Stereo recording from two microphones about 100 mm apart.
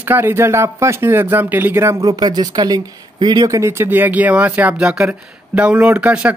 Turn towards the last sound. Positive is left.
turn(degrees=-15)  # may be behind; listen again after turning